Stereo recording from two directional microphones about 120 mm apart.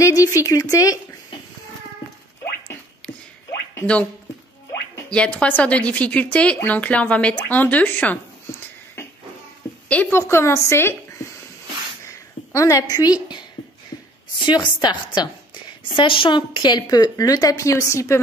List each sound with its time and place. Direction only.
0.0 s speech: 30° left (ahead or behind)
3.8 s speech: 10° left (ahead or behind)
5.1 s speech: 10° left (ahead or behind)
9.8 s a woman's voice: 10° left (ahead or behind); by 13.4 s 30° left (ahead or behind)
14.4 s a woman's voice: 40° left (ahead or behind); by 18.2 s 25° left (ahead or behind)